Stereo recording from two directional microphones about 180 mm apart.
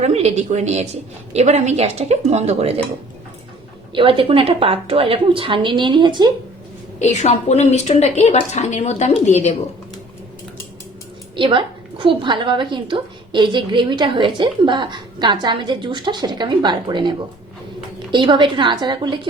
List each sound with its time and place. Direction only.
0.0 s speech: 35° right (ahead or behind)
3.9 s a woman's voice: 30° right (ahead or behind)
7.0 s a woman's voice: 40° left (ahead or behind)
11.3 s a woman's voice: 30° right (ahead or behind)